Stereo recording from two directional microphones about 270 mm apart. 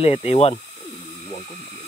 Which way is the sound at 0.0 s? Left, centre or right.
Left.